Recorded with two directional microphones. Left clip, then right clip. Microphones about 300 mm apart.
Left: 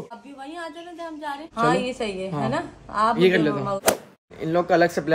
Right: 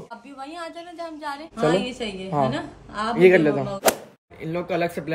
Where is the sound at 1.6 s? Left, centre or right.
Centre.